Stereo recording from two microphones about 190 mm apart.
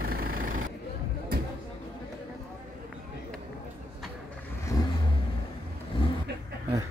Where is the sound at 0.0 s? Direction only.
50° right (ahead or behind).